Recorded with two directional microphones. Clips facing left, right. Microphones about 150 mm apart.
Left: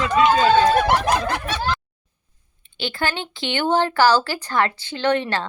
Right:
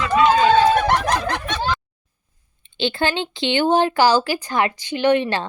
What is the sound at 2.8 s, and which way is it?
Speech, 25° right (ahead or behind).